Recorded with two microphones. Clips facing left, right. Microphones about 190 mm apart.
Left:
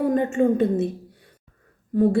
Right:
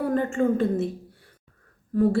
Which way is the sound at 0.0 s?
20° left (ahead or behind).